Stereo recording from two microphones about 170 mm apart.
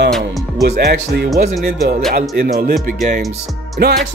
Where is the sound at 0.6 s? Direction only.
70° right (ahead or behind).